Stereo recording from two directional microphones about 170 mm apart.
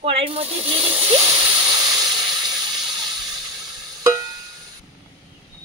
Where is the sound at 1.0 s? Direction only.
25° right (ahead or behind).